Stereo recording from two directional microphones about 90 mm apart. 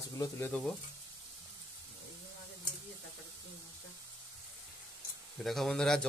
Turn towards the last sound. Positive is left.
turn(degrees=5)  # may be behind; listen again after turning